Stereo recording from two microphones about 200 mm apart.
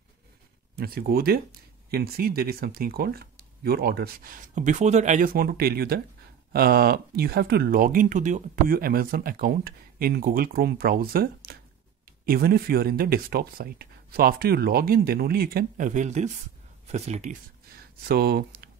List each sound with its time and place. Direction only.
0.7 s speech: 50° right (ahead or behind); by 17.4 s 35° right (ahead or behind)
18.0 s speech: 50° right (ahead or behind)